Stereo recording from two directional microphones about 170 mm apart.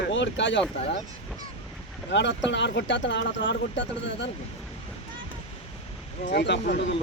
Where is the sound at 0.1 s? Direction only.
90° left.